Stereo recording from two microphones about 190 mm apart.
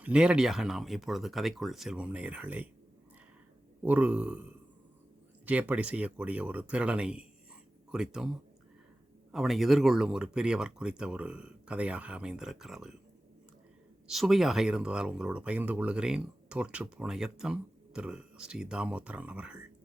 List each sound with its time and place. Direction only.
0.0 s speech: 5° right (ahead or behind)
3.8 s speech: 5° right (ahead or behind)
5.5 s speech: 5° right (ahead or behind)
14.1 s speech: centre (ahead or behind)